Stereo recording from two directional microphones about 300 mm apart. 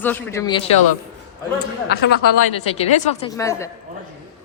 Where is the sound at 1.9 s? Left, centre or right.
Left.